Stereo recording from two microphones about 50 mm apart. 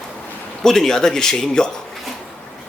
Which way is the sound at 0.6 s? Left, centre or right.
Centre.